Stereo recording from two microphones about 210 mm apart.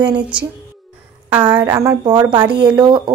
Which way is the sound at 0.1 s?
5° right (ahead or behind).